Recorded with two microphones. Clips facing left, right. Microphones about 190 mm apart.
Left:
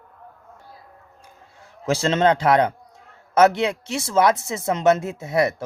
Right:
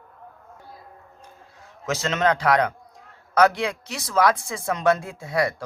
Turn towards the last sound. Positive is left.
turn(degrees=25)  # may be behind; listen again after turning